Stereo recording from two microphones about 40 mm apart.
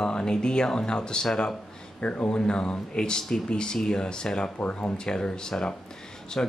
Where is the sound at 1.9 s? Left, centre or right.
Left.